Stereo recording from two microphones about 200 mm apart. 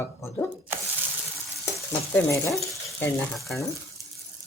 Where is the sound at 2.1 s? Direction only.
15° left (ahead or behind).